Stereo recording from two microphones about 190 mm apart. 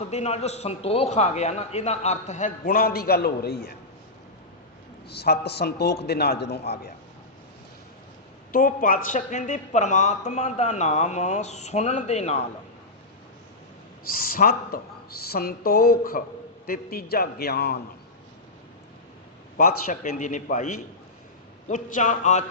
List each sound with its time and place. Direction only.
0.1 s speech: 35° left (ahead or behind); by 3.8 s 55° left (ahead or behind)
5.0 s a man's voice: 60° left (ahead or behind)
8.5 s speech: 45° left (ahead or behind)
14.1 s a man's voice: 50° left (ahead or behind)
19.5 s speech: 45° left (ahead or behind)